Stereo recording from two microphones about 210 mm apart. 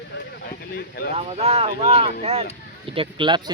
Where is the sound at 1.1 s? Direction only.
30° right (ahead or behind).